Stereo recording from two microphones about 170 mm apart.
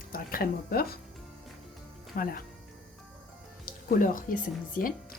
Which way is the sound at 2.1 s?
60° left (ahead or behind).